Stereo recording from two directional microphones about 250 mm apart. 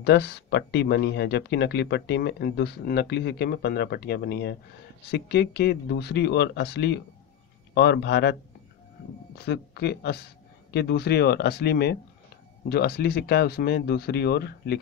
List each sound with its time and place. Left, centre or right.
0.0 s a man's voice: left